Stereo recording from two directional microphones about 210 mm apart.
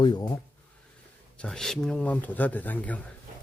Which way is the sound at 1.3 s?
5° left (ahead or behind).